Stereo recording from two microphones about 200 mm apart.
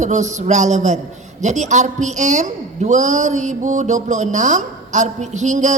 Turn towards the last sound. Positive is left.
turn(degrees=-35)  # may be behind; listen again after turning